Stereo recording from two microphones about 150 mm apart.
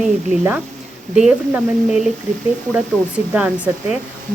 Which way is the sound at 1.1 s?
5° right (ahead or behind).